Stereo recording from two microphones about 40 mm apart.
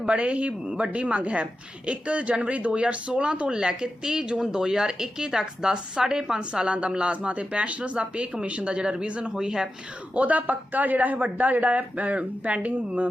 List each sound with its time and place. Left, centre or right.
0.1 s speech: right
9.3 s speech: centre
10.2 s speech: right